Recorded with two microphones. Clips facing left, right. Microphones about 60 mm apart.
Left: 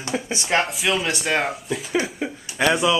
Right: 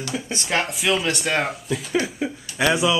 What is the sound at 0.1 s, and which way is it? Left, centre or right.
Speech, left.